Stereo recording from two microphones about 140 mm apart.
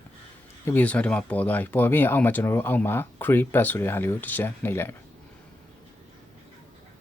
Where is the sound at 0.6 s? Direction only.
10° left (ahead or behind).